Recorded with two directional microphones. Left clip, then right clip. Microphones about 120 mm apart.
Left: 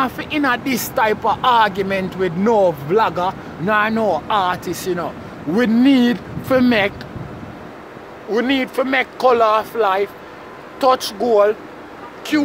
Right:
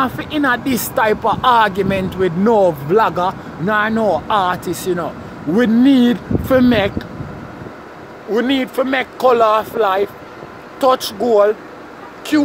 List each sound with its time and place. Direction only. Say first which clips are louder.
0.0 s speech: right 2 dB; 15° right (ahead or behind)
3.6 s speech: even; 10° right (ahead or behind)
4.0 s speech: right 2 dB; 25° right (ahead or behind)
5.7 s speech: right 1 dB; 5° right (ahead or behind)
8.3 s speech: right 1 dB; 15° right (ahead or behind)